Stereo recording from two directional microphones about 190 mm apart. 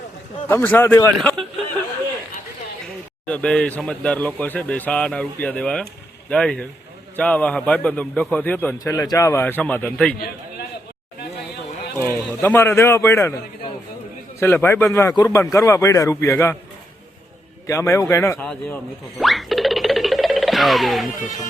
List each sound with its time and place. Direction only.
0.4 s a man's voice: 10° left (ahead or behind)
3.2 s a man's voice: 5° left (ahead or behind)
11.9 s a man's voice: 10° left (ahead or behind)
17.7 s a man's voice: 15° left (ahead or behind)
19.2 s music: centre (ahead or behind)